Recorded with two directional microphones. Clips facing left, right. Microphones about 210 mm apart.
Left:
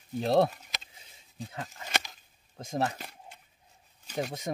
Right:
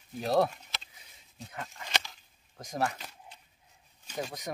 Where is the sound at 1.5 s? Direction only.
25° left (ahead or behind).